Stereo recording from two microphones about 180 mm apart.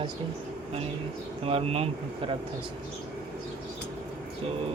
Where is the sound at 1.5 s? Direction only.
35° right (ahead or behind).